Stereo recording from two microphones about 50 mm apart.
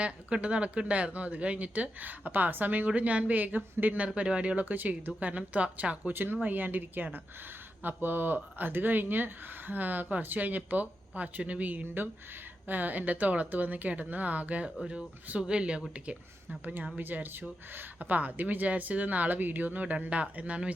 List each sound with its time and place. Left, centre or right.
0.3 s speech: right
3.9 s speech: right
4.6 s speech: right
17.0 s speech: right